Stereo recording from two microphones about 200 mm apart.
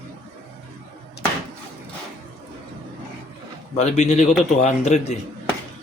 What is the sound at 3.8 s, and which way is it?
Speech, 35° left (ahead or behind).